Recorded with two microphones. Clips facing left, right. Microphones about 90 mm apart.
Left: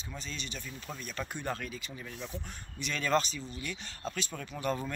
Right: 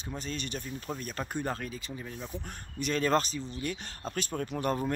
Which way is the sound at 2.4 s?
45° right (ahead or behind).